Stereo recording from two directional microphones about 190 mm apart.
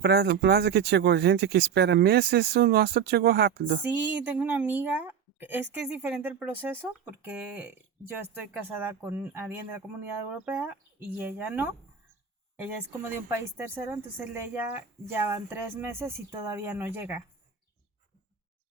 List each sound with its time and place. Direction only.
0.0 s speech: 60° right (ahead or behind)
4.2 s a woman's voice: 10° right (ahead or behind)